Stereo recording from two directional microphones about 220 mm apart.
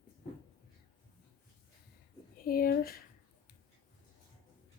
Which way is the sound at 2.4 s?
40° left (ahead or behind).